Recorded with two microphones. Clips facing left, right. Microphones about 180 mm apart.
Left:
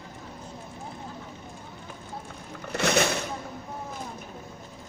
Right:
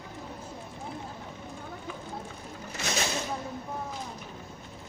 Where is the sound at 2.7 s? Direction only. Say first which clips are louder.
Left 9 dB; 65° left (ahead or behind).